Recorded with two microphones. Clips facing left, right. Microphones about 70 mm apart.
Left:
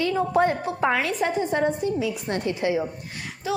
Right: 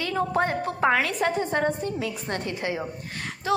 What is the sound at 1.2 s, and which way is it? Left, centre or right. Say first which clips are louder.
Music: even; centre.